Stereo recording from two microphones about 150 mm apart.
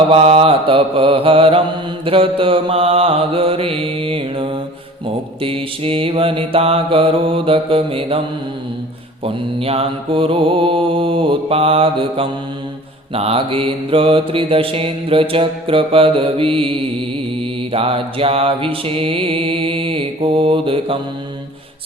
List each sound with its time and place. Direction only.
0.1 s mantra: 40° right (ahead or behind)
9.2 s mantra: 40° right (ahead or behind)